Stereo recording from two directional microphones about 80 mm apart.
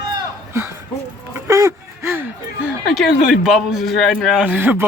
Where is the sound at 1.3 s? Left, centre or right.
Right.